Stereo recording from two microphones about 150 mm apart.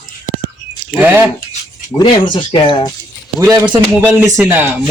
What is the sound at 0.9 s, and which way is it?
Speech, 10° right (ahead or behind).